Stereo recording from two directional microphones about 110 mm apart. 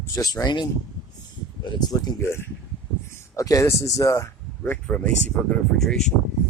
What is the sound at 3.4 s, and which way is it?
Speech, 30° left (ahead or behind).